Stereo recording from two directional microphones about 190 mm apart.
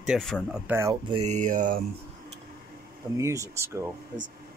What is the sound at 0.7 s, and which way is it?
Speech, 15° right (ahead or behind).